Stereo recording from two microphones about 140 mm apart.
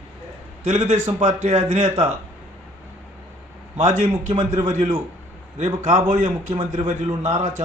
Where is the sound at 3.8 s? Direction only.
55° right (ahead or behind).